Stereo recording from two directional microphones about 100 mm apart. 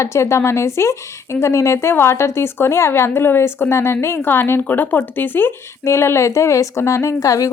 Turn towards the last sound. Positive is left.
turn(degrees=35)  # may be behind; listen again after turning